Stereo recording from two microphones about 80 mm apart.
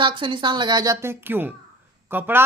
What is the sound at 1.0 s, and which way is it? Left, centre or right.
Speech, right.